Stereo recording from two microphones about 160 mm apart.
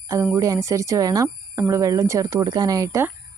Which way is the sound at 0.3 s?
20° right (ahead or behind).